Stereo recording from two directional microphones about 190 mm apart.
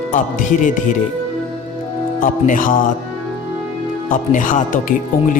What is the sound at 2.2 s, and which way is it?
Speech, 45° left (ahead or behind).